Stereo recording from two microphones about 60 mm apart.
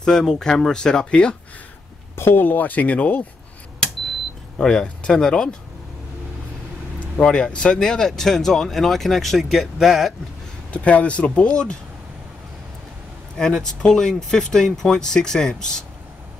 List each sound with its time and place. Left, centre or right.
0.0 s speech: centre
2.1 s speech: left
4.6 s speech: centre
7.2 s speech: centre
10.7 s speech: left
13.4 s speech: centre